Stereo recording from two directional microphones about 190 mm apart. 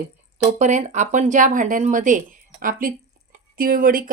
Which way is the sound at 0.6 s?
35° right (ahead or behind).